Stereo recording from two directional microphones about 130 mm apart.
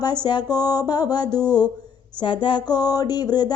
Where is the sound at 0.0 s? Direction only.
35° left (ahead or behind).